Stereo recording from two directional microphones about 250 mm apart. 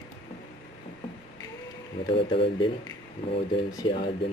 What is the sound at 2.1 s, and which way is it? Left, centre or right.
Speech, left.